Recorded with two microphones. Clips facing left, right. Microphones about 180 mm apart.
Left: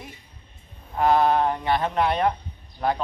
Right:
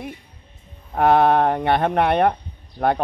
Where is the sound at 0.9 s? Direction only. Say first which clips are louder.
Right 4 dB; 60° right (ahead or behind).